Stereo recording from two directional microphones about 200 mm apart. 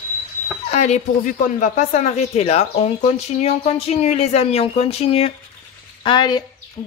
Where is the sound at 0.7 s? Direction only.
35° left (ahead or behind).